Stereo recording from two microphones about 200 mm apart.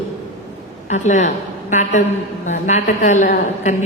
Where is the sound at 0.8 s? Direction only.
35° left (ahead or behind).